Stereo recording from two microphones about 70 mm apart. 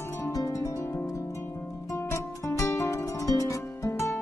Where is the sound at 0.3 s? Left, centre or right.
Left.